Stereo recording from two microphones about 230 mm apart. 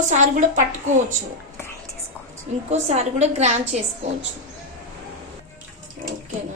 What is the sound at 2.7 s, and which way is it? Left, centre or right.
A woman's voice, right.